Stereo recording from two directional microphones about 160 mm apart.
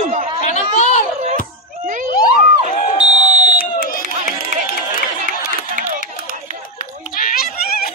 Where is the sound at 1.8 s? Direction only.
55° right (ahead or behind).